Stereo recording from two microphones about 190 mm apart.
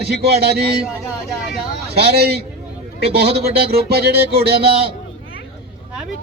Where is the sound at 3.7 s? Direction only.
55° right (ahead or behind).